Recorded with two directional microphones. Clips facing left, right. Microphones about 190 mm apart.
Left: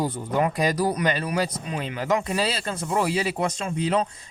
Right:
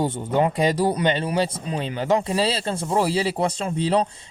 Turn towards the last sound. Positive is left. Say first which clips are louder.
# right 3 dB
turn(degrees=-35)  # may be behind; listen again after turning